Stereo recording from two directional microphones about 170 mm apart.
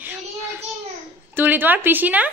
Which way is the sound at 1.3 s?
10° right (ahead or behind).